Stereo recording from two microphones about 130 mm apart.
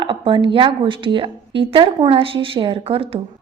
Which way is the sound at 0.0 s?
40° right (ahead or behind).